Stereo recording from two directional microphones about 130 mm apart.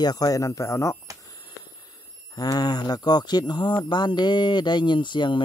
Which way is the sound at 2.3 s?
30° left (ahead or behind).